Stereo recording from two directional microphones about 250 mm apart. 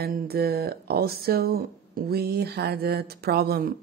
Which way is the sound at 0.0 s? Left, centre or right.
Right.